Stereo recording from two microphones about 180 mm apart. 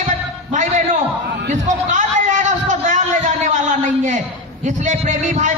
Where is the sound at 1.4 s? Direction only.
45° right (ahead or behind).